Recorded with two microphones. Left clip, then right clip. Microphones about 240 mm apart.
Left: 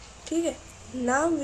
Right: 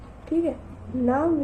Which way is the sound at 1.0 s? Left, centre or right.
Left.